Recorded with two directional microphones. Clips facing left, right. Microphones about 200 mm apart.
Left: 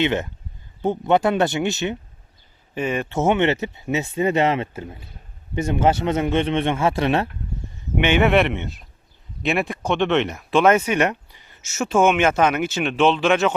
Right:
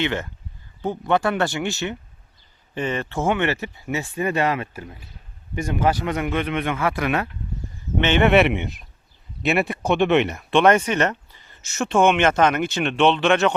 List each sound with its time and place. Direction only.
0.0 s speech: 20° left (ahead or behind)
2.7 s speech: 10° left (ahead or behind); by 7.3 s 30° left (ahead or behind)
7.9 s speech: 10° left (ahead or behind)
8.3 s speech: 5° right (ahead or behind)
8.5 s speech: 15° right (ahead or behind)
9.4 s speech: 5° right (ahead or behind)